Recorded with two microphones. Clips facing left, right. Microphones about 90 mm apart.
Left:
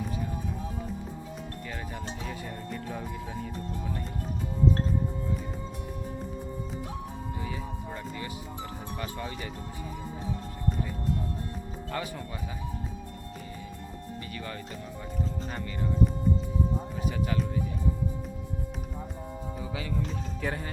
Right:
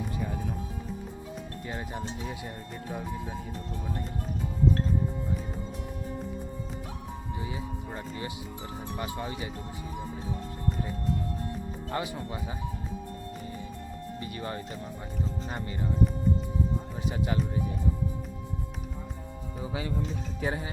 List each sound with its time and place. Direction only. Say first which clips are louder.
1.6 s speech: right 3 dB; 25° right (ahead or behind)
7.4 s music: even; 20° right (ahead or behind)
9.0 s speech: right 2 dB; 20° right (ahead or behind)
11.9 s speech: right 2 dB; 25° right (ahead or behind)
14.3 s speech: right 4 dB; 30° right (ahead or behind)
20.4 s speech: right 2 dB; 15° right (ahead or behind)